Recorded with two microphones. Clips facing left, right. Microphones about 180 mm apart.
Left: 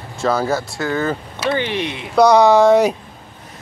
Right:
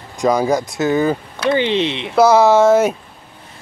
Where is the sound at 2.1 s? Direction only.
5° right (ahead or behind).